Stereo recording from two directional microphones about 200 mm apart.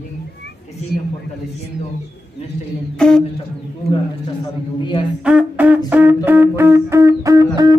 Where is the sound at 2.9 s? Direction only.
5° left (ahead or behind).